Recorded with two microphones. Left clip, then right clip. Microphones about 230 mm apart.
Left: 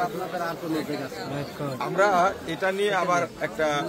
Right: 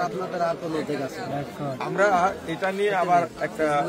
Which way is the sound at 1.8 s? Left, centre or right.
Left.